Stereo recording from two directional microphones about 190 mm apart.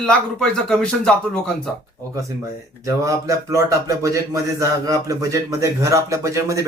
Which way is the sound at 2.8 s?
15° right (ahead or behind).